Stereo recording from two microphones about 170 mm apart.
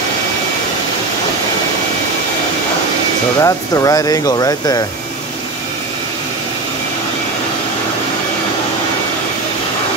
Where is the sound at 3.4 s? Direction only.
20° left (ahead or behind).